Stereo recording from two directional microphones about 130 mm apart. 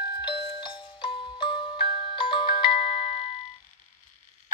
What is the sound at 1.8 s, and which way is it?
Music, 40° left (ahead or behind).